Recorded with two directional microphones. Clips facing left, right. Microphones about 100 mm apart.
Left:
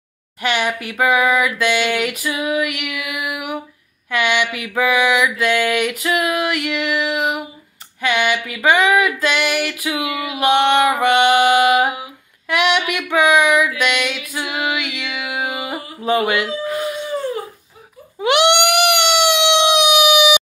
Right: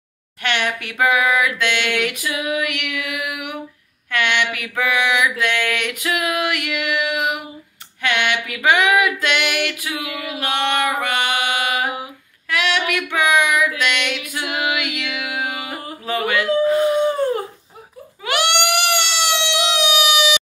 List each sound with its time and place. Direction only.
0.4 s a sound: 5° left (ahead or behind)
10.4 s female singing: 20° left (ahead or behind)
13.7 s music: 5° left (ahead or behind)
16.1 s speech: 20° left (ahead or behind)
16.6 s howl: 30° right (ahead or behind)
18.2 s a sound: 15° left (ahead or behind)